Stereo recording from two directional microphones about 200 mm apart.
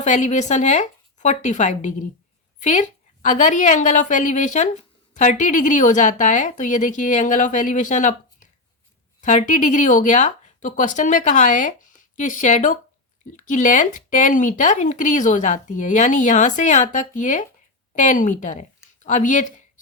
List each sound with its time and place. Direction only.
0.0 s a woman's voice: 35° left (ahead or behind)